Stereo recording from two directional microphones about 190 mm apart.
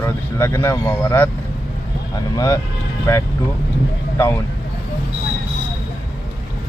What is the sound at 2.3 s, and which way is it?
Speech, 20° left (ahead or behind).